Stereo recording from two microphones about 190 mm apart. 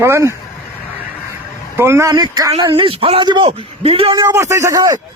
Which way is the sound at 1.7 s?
15° right (ahead or behind).